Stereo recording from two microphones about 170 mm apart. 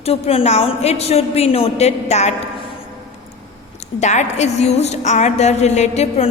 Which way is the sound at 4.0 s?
45° left (ahead or behind).